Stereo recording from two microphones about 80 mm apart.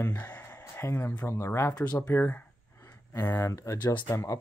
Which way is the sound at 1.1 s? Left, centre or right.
Left.